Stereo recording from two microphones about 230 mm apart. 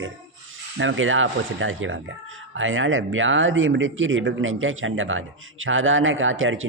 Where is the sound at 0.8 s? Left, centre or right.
Right.